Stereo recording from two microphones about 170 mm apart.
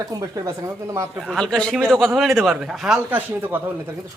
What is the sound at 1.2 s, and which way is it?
Speech, centre (ahead or behind).